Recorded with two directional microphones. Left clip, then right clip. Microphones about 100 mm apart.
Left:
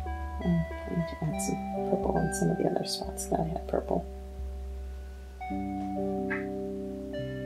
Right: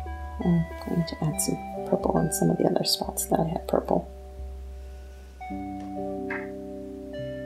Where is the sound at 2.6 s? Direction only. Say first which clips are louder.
Right 6 dB; 40° right (ahead or behind).